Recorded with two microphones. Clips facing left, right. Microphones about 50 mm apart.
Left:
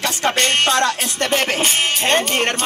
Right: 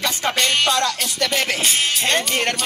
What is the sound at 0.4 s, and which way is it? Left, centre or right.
Music, left.